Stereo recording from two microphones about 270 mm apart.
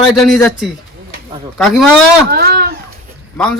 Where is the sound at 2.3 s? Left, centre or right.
Right.